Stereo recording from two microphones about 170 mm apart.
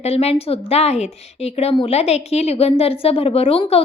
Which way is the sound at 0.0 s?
35° left (ahead or behind).